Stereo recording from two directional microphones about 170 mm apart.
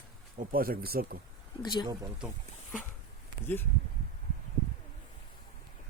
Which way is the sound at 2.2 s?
5° right (ahead or behind).